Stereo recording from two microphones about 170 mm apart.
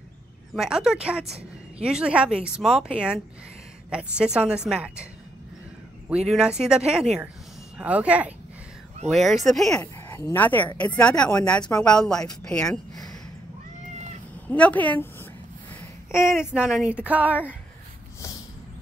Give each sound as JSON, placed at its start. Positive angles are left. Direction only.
{"t": 0.6, "sound": "speech", "side_deg": 0}
{"t": 6.0, "sound": "speech", "side_deg": -5}
{"t": 9.8, "sound": "speech", "side_deg": 15}
{"t": 12.9, "sound": "a sound", "side_deg": 20}
{"t": 14.5, "sound": "a woman's voice", "side_deg": 10}
{"t": 15.7, "sound": "a sound", "side_deg": 15}
{"t": 16.3, "sound": "speech", "side_deg": -5}